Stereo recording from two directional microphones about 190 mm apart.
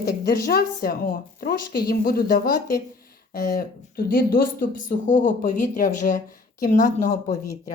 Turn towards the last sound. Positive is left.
turn(degrees=40)  # may be behind; listen again after turning